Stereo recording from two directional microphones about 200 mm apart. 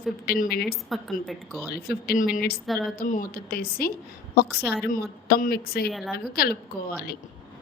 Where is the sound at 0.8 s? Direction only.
Centre (ahead or behind).